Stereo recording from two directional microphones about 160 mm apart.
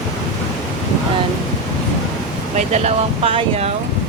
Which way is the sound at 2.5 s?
45° right (ahead or behind).